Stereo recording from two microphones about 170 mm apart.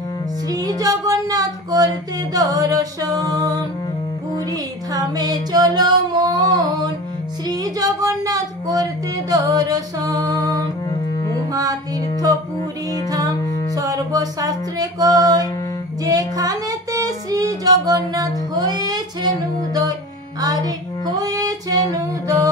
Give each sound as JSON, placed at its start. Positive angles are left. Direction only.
{"t": 0.5, "sound": "music", "side_deg": -20}
{"t": 7.4, "sound": "a sound", "side_deg": -20}
{"t": 9.3, "sound": "music", "side_deg": -20}
{"t": 13.1, "sound": "music", "side_deg": -20}
{"t": 13.4, "sound": "music", "side_deg": 20}
{"t": 13.7, "sound": "music", "side_deg": -20}
{"t": 16.0, "sound": "female singing", "side_deg": -20}